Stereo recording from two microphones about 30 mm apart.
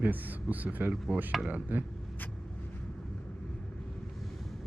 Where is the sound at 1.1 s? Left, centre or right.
Right.